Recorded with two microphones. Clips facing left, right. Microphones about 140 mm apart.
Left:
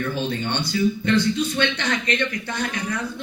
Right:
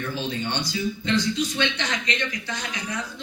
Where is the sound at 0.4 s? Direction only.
55° left (ahead or behind).